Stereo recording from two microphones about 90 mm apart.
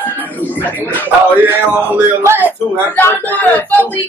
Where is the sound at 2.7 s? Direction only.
20° left (ahead or behind).